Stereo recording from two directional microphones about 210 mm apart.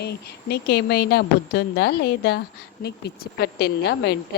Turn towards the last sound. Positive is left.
turn(degrees=50)  # may be behind; listen again after turning